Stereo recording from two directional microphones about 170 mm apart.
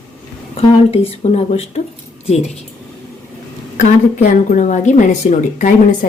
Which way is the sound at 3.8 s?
45° left (ahead or behind).